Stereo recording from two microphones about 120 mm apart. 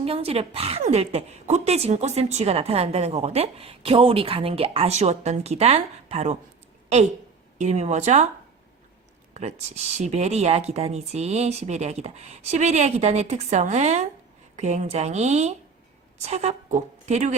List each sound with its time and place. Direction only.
0.0 s a woman's voice: 55° right (ahead or behind)
7.6 s speech: 70° right (ahead or behind)
9.3 s speech: 65° right (ahead or behind)